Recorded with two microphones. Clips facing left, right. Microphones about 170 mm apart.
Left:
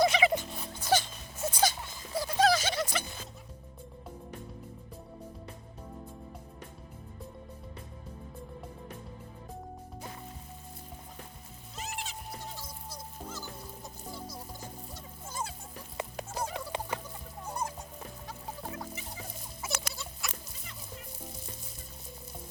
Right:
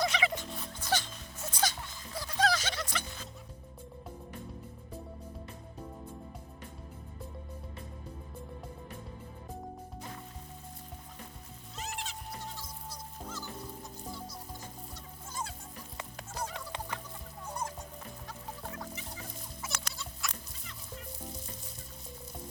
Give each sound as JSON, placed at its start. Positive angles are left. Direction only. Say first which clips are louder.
{"t": 0.0, "sound": "music", "louder": "left 6 dB", "side_deg": 10}
{"t": 11.8, "sound": "music", "louder": "left 1 dB", "side_deg": 10}
{"t": 15.3, "sound": "music", "louder": "left 2 dB", "side_deg": 5}
{"t": 18.7, "sound": "fowl", "louder": "left 2 dB", "side_deg": 15}
{"t": 19.6, "sound": "music", "louder": "left 5 dB", "side_deg": 5}